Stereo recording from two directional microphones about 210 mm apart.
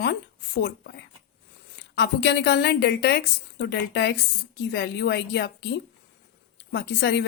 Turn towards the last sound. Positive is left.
turn(degrees=55)  # may be behind; listen again after turning